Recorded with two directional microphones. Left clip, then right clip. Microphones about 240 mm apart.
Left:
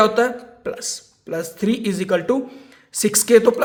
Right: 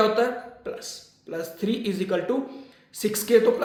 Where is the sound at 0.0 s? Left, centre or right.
Left.